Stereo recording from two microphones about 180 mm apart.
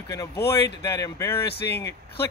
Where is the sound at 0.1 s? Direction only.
20° left (ahead or behind).